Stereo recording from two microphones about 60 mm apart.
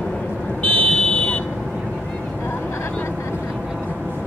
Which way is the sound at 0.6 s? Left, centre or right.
Centre.